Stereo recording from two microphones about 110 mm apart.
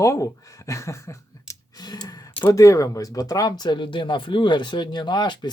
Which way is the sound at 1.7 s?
40° left (ahead or behind).